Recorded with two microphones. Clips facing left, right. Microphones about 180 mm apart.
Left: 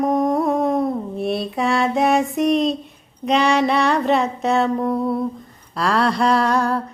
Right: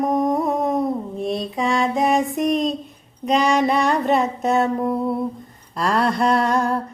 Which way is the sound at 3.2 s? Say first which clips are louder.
Left 1 dB; 40° right (ahead or behind).